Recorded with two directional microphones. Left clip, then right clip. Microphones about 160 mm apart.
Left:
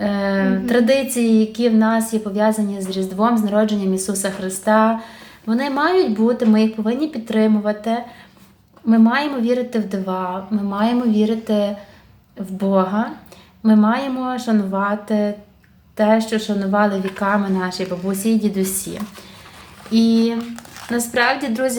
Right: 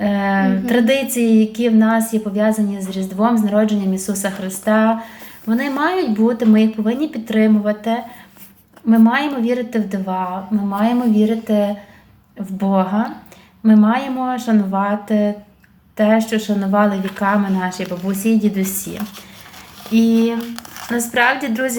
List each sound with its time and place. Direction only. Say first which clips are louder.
0.0 s a sound: right 2 dB; 5° right (ahead or behind)
1.1 s a woman's voice: right 2 dB; 10° right (ahead or behind)
19.9 s speech: right 1 dB; 35° right (ahead or behind)
20.1 s a woman's voice: right 1 dB; 10° right (ahead or behind)